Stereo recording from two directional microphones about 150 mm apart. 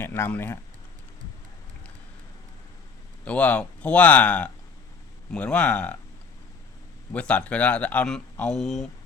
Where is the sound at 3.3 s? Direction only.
10° left (ahead or behind).